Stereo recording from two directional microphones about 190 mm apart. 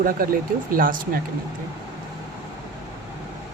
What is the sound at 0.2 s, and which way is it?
Speech, 50° right (ahead or behind).